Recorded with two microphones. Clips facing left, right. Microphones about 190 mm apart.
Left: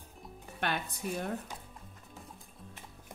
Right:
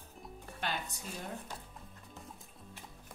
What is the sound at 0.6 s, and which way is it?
Speech, 60° left (ahead or behind).